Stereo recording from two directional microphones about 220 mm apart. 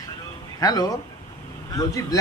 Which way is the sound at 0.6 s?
15° left (ahead or behind).